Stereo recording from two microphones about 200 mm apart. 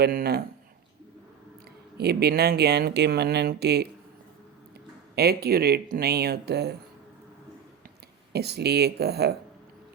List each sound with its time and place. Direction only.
0.0 s speech: 50° right (ahead or behind)
2.0 s speech: 55° right (ahead or behind)
5.1 s speech: 55° right (ahead or behind)
8.3 s speech: 55° right (ahead or behind)